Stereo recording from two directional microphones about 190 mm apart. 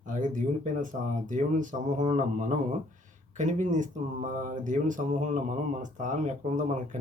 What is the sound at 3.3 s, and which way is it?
Speech, 40° right (ahead or behind).